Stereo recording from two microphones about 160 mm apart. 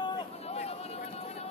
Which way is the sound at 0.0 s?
40° left (ahead or behind).